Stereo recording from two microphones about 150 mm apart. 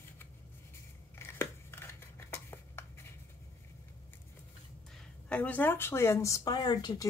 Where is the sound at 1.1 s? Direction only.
15° left (ahead or behind).